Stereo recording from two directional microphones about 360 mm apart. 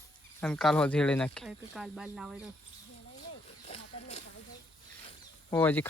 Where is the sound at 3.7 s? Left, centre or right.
Centre.